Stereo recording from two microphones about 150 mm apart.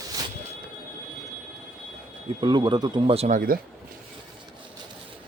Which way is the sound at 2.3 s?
30° right (ahead or behind).